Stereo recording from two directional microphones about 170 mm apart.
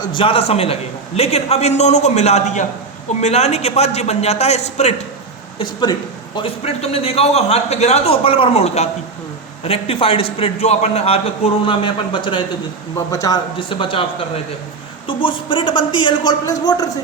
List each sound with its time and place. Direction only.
0.0 s a man's voice: 30° left (ahead or behind)
5.8 s a man's voice: 25° left (ahead or behind)
15.0 s speech: 30° left (ahead or behind)